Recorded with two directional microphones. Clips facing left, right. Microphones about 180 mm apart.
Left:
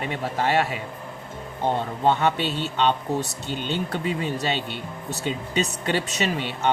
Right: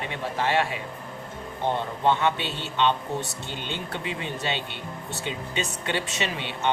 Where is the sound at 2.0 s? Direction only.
40° left (ahead or behind).